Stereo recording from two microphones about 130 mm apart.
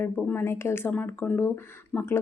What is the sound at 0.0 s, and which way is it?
Speech, 15° left (ahead or behind).